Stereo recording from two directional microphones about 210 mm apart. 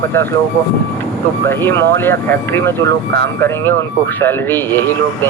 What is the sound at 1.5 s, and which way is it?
Speech, 10° left (ahead or behind).